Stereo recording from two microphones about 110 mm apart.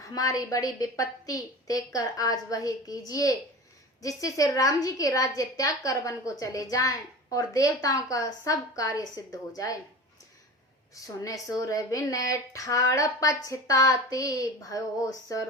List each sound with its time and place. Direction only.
0.1 s speech: 35° left (ahead or behind)
10.9 s a woman's voice: 30° left (ahead or behind)